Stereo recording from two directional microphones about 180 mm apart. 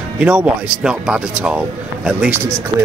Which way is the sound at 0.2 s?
5° right (ahead or behind).